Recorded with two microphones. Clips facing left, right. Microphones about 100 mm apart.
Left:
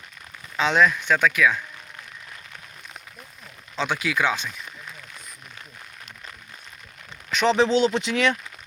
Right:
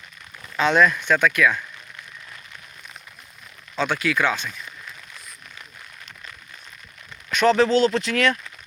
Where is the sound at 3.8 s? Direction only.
10° left (ahead or behind).